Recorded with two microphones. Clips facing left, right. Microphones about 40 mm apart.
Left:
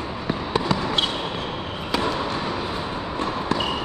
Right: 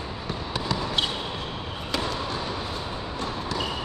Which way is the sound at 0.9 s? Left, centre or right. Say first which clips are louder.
Left 4 dB; centre.